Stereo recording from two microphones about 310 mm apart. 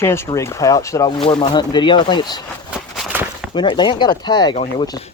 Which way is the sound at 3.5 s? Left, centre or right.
Centre.